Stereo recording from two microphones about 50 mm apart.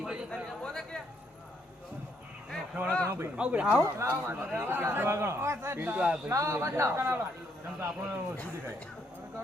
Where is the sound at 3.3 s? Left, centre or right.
Right.